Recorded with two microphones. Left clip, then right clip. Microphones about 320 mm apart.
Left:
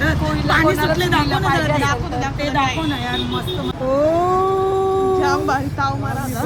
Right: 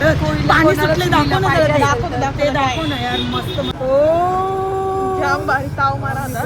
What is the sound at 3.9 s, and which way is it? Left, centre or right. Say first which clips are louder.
Speech: right 2 dB; left.